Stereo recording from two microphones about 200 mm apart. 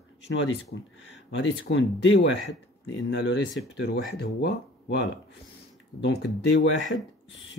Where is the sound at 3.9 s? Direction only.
50° left (ahead or behind).